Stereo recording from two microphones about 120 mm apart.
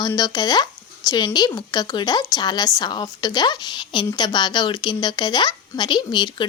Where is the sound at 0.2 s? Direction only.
35° left (ahead or behind).